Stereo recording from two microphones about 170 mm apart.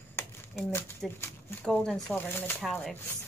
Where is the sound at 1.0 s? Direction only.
Centre (ahead or behind).